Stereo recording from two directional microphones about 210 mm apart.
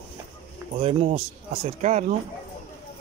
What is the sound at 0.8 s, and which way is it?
Speech, 30° right (ahead or behind).